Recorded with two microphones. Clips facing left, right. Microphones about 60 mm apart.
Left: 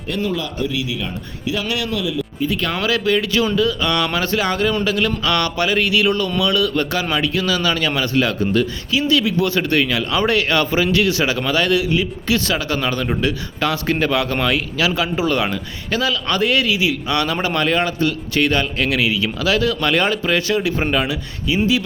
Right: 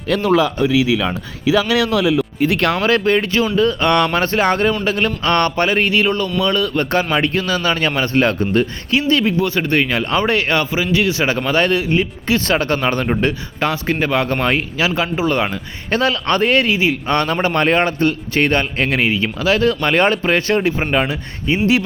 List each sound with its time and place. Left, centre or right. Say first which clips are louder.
0.2 s a man's voice: right 6 dB; right
1.9 s speech: right 7 dB; right
2.8 s a man's voice: right 3 dB; right
9.4 s a man's voice: right 1 dB; right
15.9 s a man's voice: right 3 dB; right